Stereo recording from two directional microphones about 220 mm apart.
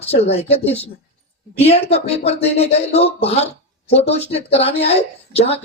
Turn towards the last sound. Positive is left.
turn(degrees=25)  # may be behind; listen again after turning